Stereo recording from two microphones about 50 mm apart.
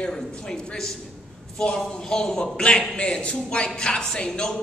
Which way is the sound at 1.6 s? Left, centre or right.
Centre.